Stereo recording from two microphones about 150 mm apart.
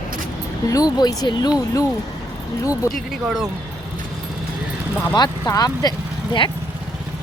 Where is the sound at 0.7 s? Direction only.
25° left (ahead or behind).